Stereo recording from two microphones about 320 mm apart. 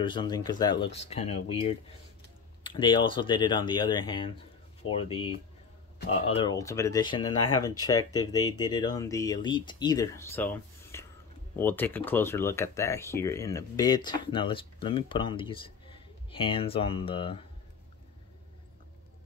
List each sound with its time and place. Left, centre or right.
0.0 s speech: centre
2.7 s speech: centre
4.8 s speech: left
6.0 s speech: centre